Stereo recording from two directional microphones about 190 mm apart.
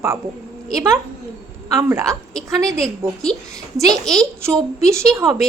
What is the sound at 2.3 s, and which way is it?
A woman's voice, 5° left (ahead or behind).